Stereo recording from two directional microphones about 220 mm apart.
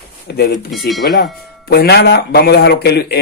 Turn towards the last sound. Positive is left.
turn(degrees=50)  # may be behind; listen again after turning